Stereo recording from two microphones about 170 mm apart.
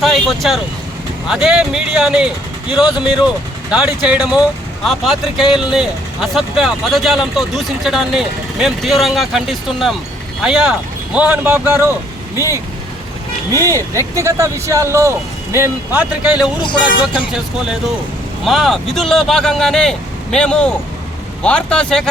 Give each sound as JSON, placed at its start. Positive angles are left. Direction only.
{"t": 0.0, "sound": "speech", "side_deg": 0}
{"t": 13.5, "sound": "speech", "side_deg": -20}